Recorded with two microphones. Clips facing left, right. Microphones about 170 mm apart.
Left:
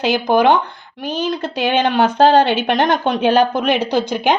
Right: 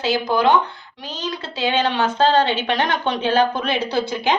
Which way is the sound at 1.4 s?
15° left (ahead or behind).